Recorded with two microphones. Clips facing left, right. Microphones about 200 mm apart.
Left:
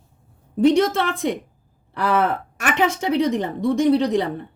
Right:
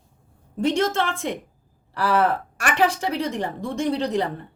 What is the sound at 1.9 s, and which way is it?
A woman's voice, centre (ahead or behind).